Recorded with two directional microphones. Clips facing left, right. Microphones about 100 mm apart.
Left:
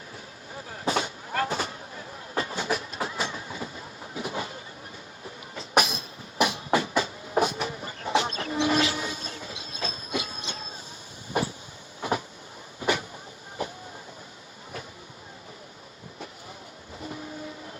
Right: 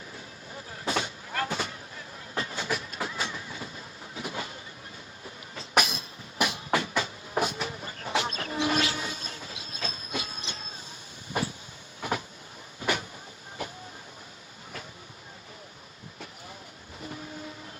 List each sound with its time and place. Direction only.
0.9 s vehicle: 30° left (ahead or behind)
4.1 s train: 30° left (ahead or behind)
5.5 s train: 25° left (ahead or behind)
11.9 s train: 25° left (ahead or behind)
12.8 s vehicle: 30° left (ahead or behind)